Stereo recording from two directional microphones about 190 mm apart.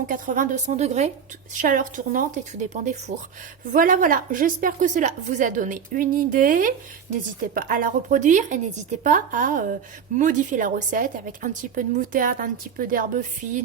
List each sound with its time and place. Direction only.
0.1 s a woman's voice: 45° right (ahead or behind)